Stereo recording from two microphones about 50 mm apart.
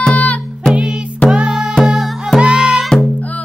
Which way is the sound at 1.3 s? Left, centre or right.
Centre.